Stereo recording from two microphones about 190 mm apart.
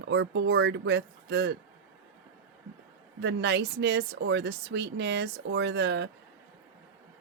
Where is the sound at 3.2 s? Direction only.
65° right (ahead or behind).